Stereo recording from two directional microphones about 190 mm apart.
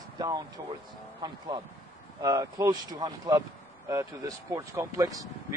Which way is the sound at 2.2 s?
15° right (ahead or behind).